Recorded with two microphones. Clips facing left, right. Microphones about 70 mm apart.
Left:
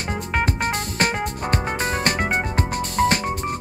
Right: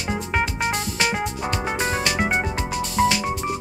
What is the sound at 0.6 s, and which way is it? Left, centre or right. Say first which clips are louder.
Music: left 1 dB; left.